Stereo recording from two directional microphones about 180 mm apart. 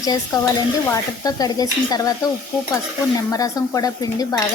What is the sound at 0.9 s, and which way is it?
Speech, 20° left (ahead or behind).